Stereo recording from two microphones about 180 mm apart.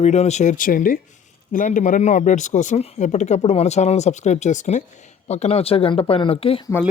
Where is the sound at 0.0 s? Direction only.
40° left (ahead or behind).